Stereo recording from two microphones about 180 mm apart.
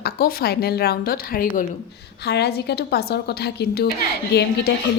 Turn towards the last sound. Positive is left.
turn(degrees=65)  # may be behind; listen again after turning